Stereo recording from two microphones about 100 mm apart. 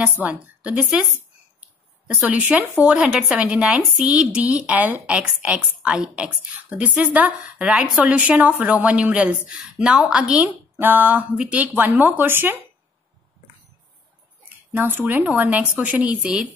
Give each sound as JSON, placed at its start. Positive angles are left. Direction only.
{"t": 0.0, "sound": "speech", "side_deg": -15}
{"t": 2.1, "sound": "speech", "side_deg": -15}
{"t": 14.7, "sound": "speech", "side_deg": -20}